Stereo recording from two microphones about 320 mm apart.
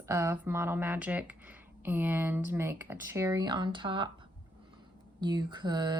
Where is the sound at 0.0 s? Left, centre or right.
Centre.